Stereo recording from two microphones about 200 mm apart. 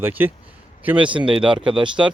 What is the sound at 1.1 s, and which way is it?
Speech, 25° right (ahead or behind).